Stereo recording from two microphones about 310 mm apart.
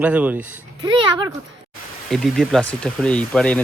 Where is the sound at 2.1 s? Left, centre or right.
Centre.